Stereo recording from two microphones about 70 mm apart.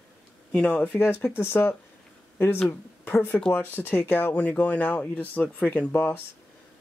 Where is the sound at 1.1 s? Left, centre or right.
Left.